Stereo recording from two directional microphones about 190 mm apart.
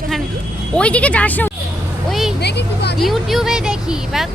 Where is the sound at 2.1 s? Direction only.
Centre (ahead or behind).